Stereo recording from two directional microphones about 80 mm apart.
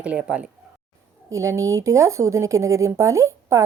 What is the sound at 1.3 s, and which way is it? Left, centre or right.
Speech, right.